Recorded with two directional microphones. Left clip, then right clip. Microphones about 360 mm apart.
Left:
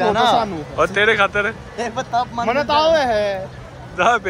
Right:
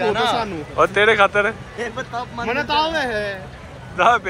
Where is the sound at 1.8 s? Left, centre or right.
Left.